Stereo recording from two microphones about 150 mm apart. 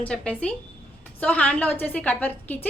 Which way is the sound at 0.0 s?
10° left (ahead or behind).